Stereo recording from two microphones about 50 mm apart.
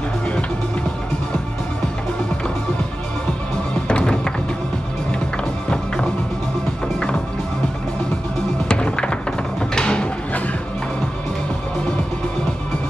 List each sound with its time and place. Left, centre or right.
3.8 s music: centre
8.6 s music: centre